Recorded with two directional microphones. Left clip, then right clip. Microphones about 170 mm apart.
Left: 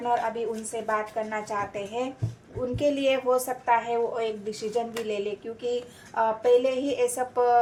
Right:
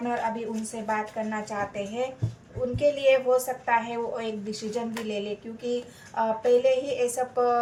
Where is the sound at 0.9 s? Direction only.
40° left (ahead or behind).